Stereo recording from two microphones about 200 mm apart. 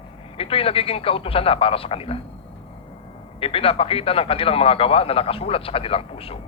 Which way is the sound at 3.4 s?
30° left (ahead or behind).